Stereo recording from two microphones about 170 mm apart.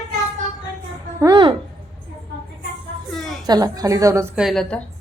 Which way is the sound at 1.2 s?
25° right (ahead or behind).